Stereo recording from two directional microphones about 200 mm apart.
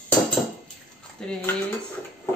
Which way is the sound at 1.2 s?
5° left (ahead or behind).